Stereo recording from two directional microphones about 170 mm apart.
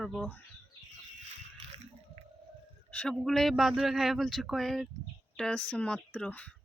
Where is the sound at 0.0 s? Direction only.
Centre (ahead or behind).